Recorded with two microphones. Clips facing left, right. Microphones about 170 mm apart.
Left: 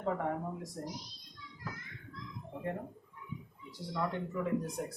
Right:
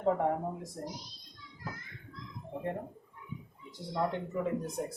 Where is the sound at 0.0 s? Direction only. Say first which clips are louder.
Right 5 dB; 30° right (ahead or behind).